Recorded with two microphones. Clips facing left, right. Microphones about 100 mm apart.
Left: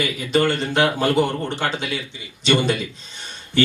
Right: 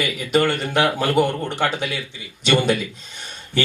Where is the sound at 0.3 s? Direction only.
50° right (ahead or behind).